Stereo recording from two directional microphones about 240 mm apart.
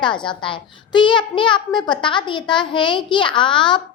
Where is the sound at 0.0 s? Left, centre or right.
Centre.